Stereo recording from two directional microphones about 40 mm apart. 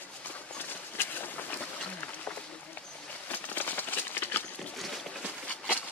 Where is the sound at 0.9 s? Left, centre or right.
Left.